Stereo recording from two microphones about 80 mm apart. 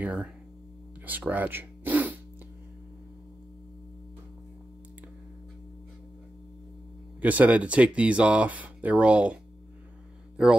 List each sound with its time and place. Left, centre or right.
0.0 s speech: centre
1.0 s a sound: right
7.2 s speech: centre